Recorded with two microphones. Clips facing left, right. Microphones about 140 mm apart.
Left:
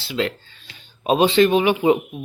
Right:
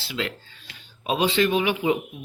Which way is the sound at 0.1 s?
35° left (ahead or behind).